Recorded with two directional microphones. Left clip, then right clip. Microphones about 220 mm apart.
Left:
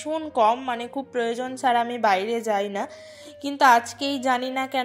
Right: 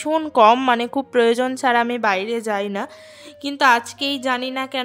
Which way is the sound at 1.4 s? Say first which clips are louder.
Right 4 dB; 35° right (ahead or behind).